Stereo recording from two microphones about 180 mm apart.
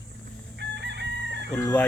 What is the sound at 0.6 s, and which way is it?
Chicken, 75° right (ahead or behind).